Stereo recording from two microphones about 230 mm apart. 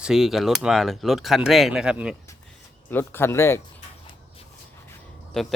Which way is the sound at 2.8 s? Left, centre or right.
Centre.